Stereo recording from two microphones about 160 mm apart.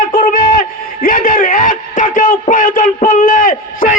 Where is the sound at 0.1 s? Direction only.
60° left (ahead or behind).